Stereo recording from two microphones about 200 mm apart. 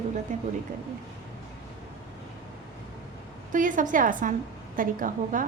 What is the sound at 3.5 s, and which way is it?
A woman's voice, 40° right (ahead or behind).